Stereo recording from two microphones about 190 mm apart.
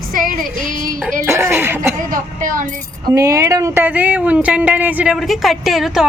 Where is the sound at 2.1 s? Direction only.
45° right (ahead or behind).